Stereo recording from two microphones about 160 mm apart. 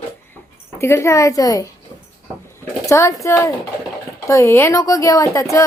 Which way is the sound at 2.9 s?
20° left (ahead or behind).